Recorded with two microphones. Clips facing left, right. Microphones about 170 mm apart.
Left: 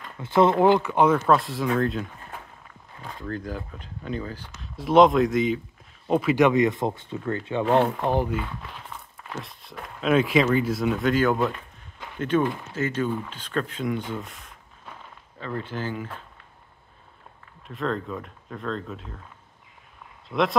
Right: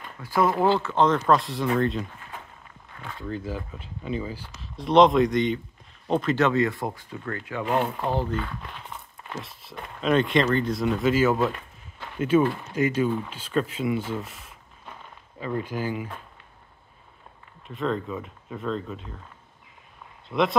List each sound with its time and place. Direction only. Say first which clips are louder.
0.2 s speech: left 4 dB; 25° left (ahead or behind); by 2.0 s centre (ahead or behind)
3.2 s speech: even; centre (ahead or behind)
4.6 s speech: left 1 dB; centre (ahead or behind); by 7.6 s 25° left (ahead or behind)
8.0 s speech: left 2 dB; 15° left (ahead or behind)
9.3 s speech: even; centre (ahead or behind)
17.6 s speech: right 1 dB; centre (ahead or behind)
20.2 s speech: even; centre (ahead or behind)